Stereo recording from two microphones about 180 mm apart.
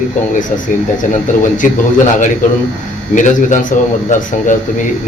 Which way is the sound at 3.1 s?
45° left (ahead or behind).